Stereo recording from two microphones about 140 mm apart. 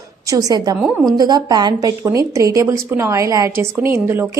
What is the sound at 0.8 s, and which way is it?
Speech, 5° right (ahead or behind).